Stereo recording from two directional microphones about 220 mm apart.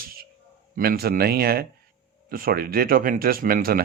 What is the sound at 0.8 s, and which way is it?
Speech, 45° right (ahead or behind).